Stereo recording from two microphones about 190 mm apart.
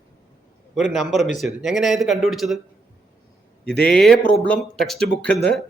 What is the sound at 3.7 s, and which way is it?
Speech, 5° left (ahead or behind).